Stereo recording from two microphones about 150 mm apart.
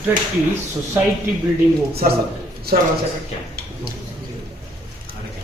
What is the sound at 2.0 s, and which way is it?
Speech, 75° right (ahead or behind).